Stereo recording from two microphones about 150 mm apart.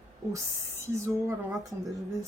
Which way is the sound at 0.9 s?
20° right (ahead or behind).